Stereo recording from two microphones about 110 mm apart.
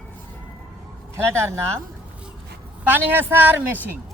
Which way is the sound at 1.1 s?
25° right (ahead or behind).